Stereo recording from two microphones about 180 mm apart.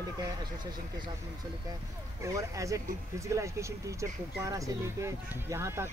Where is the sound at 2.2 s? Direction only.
20° right (ahead or behind).